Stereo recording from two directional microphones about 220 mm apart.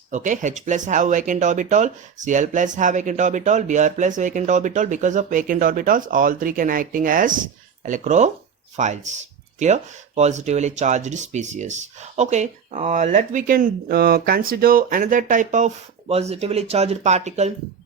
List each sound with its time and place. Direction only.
0.1 s speech: 35° right (ahead or behind)